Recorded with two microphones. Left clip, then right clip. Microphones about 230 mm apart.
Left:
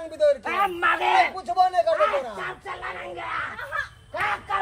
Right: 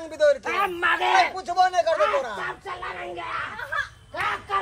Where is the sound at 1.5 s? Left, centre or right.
Centre.